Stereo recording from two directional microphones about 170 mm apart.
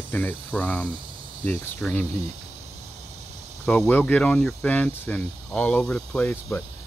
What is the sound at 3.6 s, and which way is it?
Speech, 5° left (ahead or behind).